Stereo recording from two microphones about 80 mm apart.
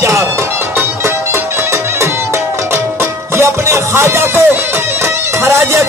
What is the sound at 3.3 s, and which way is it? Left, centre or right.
Music, right.